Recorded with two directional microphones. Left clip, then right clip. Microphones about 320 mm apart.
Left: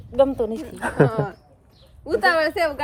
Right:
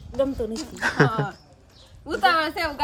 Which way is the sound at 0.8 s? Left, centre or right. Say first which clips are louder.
Left 1 dB; centre.